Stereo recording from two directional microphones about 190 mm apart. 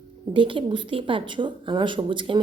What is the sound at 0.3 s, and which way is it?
Speech, 25° right (ahead or behind).